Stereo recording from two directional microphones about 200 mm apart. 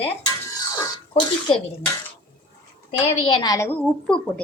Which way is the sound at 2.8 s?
25° left (ahead or behind).